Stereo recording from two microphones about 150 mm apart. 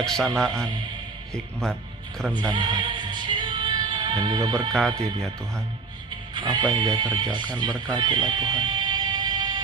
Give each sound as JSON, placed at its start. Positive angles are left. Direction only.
{"t": 0.0, "sound": "speech", "side_deg": 5}
{"t": 2.5, "sound": "music", "side_deg": -30}
{"t": 4.7, "sound": "speech", "side_deg": 5}
{"t": 6.3, "sound": "speech", "side_deg": -30}
{"t": 7.9, "sound": "music", "side_deg": -30}